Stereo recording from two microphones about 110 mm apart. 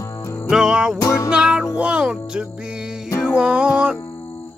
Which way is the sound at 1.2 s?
10° right (ahead or behind).